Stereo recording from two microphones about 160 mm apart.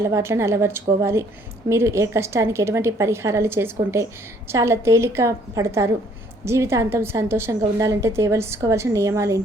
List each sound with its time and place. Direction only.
0.0 s a woman's voice: 15° right (ahead or behind)